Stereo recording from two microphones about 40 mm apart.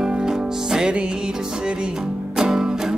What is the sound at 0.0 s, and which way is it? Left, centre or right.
Music, centre.